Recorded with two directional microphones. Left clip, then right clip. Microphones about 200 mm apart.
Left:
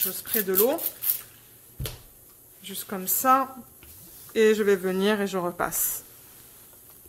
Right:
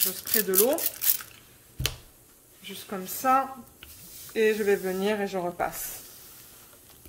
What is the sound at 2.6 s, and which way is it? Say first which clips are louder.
Speech: left 2 dB; 30° left (ahead or behind).